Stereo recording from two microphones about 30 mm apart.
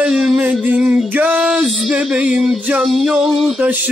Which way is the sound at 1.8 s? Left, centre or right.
Right.